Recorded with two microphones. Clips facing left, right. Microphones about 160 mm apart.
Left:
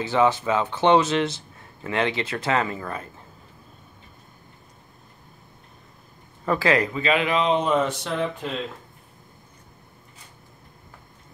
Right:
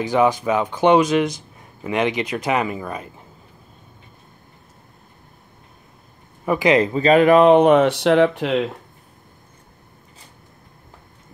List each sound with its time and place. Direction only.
0.0 s a man's voice: 15° right (ahead or behind)
6.4 s a man's voice: 15° right (ahead or behind)
6.9 s speech: 40° right (ahead or behind); by 8.6 s 75° right (ahead or behind)